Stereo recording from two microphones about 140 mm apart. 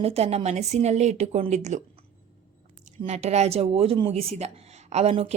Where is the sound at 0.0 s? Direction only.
45° right (ahead or behind).